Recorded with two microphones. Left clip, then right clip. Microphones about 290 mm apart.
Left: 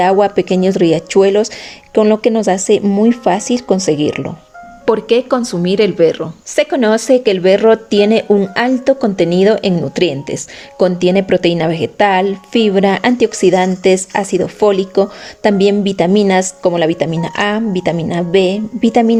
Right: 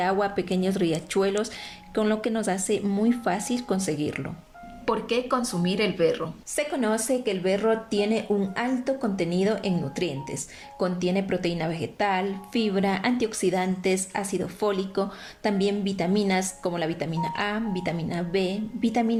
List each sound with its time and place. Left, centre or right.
0.0 s a woman's voice: left